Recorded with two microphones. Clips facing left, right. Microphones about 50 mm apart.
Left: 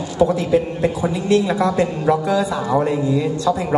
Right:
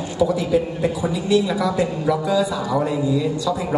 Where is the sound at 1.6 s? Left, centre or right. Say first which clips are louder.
Left 3 dB; left.